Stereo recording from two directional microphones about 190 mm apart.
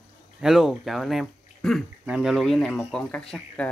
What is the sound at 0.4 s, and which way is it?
Speech, centre (ahead or behind).